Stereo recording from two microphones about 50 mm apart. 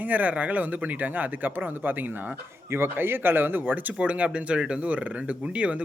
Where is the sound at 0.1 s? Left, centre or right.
Right.